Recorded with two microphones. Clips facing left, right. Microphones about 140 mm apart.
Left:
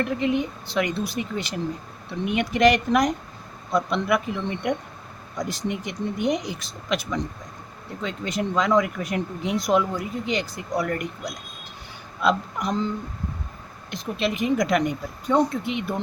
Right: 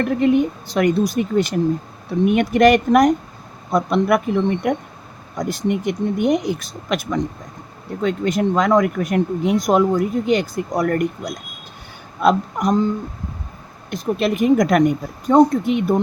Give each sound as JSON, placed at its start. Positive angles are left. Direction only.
{"t": 0.0, "sound": "speech", "side_deg": -50}
{"t": 13.9, "sound": "speech", "side_deg": -50}